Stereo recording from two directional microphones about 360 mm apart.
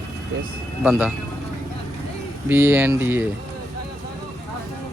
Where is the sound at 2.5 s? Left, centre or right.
Centre.